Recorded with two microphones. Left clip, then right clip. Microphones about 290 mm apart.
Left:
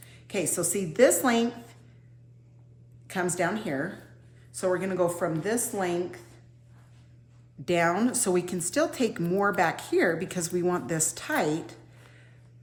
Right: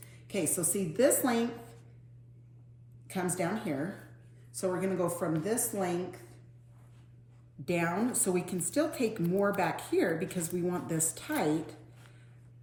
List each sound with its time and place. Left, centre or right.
0.3 s a woman's voice: centre
3.3 s a woman's voice: centre
7.6 s a woman's voice: left